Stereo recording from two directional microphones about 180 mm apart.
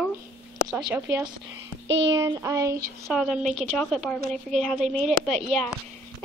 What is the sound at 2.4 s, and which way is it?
Speech, 15° right (ahead or behind).